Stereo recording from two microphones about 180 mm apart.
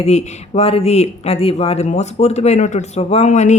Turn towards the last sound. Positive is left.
turn(degrees=40)  # may be behind; listen again after turning